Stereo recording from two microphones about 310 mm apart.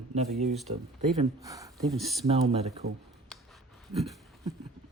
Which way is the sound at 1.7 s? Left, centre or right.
Centre.